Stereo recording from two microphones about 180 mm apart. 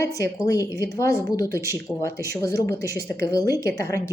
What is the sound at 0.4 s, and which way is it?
A woman's voice, 15° left (ahead or behind).